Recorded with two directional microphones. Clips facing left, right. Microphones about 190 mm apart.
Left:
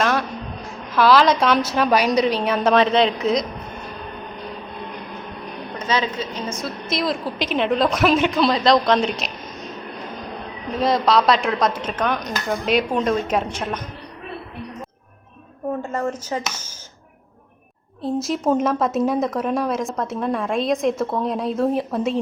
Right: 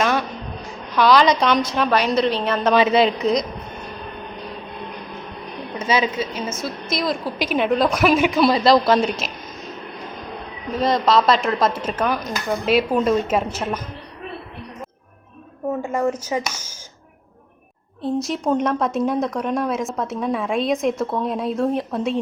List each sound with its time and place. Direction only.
0.0 s a sound: centre (ahead or behind)
0.9 s a woman's voice: centre (ahead or behind)
2.7 s speech: 5° right (ahead or behind)
5.8 s a woman's voice: 10° right (ahead or behind)
10.7 s speech: centre (ahead or behind)
15.8 s a woman's voice: 10° right (ahead or behind)
18.0 s speech: centre (ahead or behind)